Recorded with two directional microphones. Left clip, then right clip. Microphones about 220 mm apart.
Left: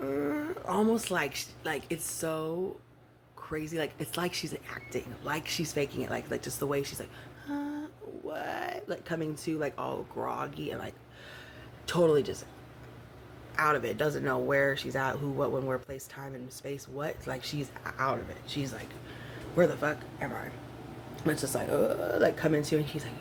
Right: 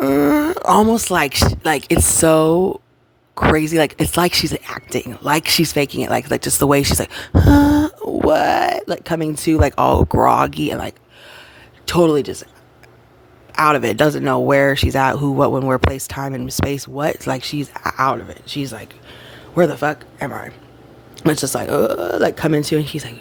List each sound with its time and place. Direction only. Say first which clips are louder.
0.0 s speech: right 18 dB; 50° right (ahead or behind)
13.6 s speech: right 14 dB; 45° right (ahead or behind)